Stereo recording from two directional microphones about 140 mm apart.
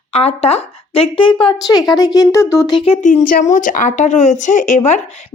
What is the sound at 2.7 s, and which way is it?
Speech, 40° left (ahead or behind).